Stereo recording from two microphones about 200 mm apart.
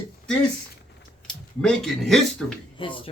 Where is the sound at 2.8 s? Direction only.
25° left (ahead or behind).